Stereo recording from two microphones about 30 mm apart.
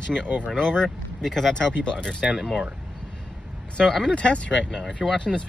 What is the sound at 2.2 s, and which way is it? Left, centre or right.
Speech, right.